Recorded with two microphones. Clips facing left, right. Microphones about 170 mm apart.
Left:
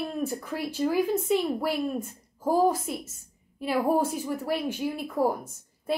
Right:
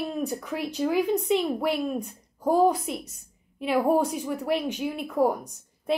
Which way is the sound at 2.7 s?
Centre (ahead or behind).